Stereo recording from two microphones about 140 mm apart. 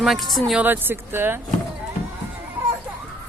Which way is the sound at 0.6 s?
15° right (ahead or behind).